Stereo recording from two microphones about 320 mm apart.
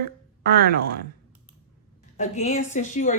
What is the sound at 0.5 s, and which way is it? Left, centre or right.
Speech, right.